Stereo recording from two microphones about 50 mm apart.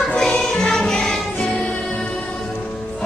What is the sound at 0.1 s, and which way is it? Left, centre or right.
Music, centre.